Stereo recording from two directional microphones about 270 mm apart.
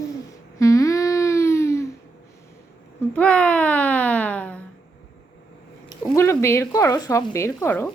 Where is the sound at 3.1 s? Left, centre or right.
Centre.